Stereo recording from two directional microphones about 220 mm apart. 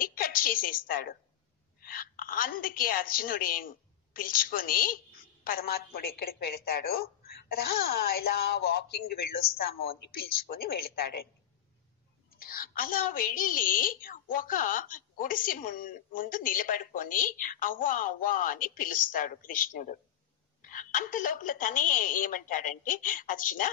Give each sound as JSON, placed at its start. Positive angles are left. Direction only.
{"t": 0.0, "sound": "a woman's voice", "side_deg": 40}
{"t": 12.3, "sound": "a woman's voice", "side_deg": 40}